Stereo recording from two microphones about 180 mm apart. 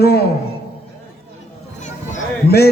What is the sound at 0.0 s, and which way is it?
Speech, 60° left (ahead or behind).